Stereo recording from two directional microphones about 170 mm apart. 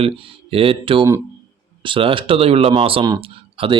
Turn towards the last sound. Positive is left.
turn(degrees=-35)  # may be behind; listen again after turning